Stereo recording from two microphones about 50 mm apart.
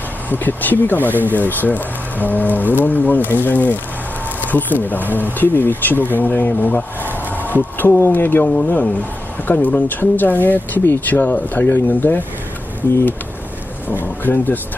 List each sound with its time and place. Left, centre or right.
0.3 s speech: left
13.8 s speech: left